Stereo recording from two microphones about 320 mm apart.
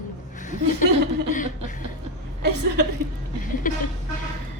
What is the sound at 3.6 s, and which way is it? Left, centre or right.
Vehicle, left.